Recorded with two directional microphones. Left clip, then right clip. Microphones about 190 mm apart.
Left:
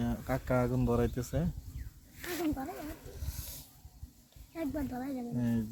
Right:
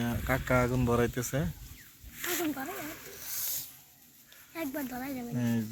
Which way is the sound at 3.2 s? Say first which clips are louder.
Right 10 dB; centre (ahead or behind).